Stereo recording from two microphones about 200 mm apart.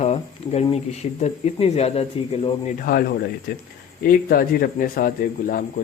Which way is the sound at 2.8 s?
45° left (ahead or behind).